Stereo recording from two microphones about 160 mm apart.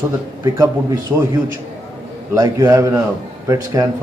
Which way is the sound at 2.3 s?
20° right (ahead or behind).